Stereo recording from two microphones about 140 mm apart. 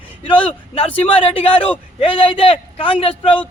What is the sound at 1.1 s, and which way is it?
Speech, 40° left (ahead or behind).